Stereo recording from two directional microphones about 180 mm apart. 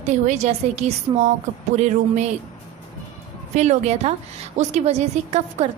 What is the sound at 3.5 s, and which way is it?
A woman's voice, 40° right (ahead or behind).